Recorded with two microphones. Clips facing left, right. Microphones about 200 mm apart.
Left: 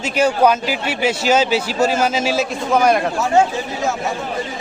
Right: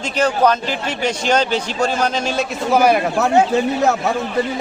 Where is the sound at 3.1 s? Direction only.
60° right (ahead or behind).